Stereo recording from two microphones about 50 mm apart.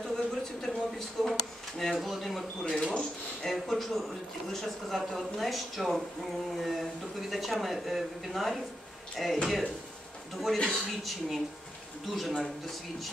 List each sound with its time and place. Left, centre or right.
0.0 s a sound: centre
1.8 s speech: centre
2.6 s speech: centre
3.6 s speech: centre